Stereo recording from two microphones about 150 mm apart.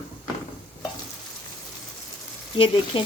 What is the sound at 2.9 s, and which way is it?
Speech, 35° left (ahead or behind).